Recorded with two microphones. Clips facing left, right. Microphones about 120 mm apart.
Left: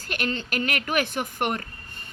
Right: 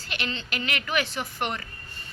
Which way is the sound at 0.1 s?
50° left (ahead or behind).